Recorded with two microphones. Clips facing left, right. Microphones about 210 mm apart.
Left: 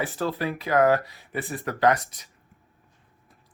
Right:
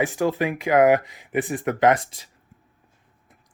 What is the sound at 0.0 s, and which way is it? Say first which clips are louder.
Speech: right 5 dB; 15° right (ahead or behind).